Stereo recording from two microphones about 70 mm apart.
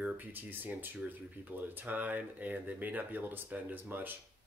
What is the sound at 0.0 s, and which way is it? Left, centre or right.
Speech, right.